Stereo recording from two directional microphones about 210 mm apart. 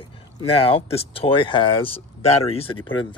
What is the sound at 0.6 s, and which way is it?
Speech, 25° left (ahead or behind).